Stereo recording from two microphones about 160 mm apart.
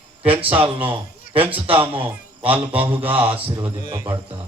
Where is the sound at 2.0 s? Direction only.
10° right (ahead or behind).